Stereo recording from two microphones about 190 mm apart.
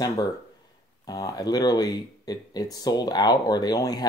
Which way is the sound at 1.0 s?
20° left (ahead or behind).